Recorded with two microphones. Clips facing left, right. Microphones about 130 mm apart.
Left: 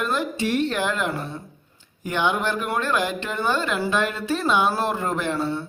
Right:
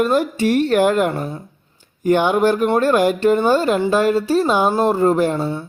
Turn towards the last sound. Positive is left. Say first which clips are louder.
# right 8 dB
turn(degrees=-40)  # may be behind; listen again after turning